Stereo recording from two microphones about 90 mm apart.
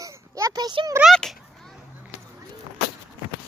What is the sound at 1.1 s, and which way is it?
Speech, 5° left (ahead or behind).